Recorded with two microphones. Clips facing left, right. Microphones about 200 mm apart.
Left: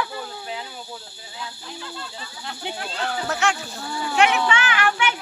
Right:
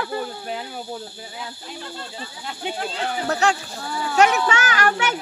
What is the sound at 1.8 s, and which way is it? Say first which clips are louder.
Speech: right 2 dB; 45° right (ahead or behind).